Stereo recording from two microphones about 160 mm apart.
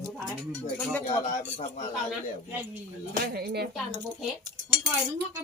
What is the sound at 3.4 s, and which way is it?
Speech, 85° right.